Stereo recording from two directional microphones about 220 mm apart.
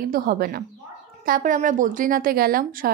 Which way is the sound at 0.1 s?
40° right (ahead or behind).